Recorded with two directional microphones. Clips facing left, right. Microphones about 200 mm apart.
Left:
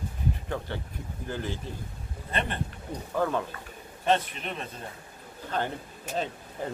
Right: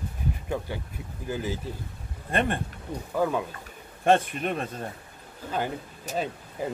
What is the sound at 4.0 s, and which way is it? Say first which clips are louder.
Speech: right 4 dB; 50° right (ahead or behind).